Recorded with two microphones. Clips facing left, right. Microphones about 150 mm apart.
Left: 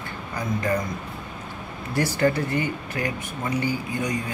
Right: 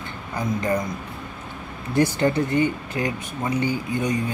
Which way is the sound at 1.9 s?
20° right (ahead or behind).